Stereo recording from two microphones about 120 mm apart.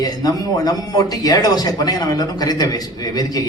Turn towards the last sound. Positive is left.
turn(degrees=30)  # may be behind; listen again after turning